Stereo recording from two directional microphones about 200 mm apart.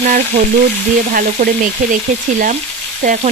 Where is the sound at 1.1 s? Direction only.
40° right (ahead or behind).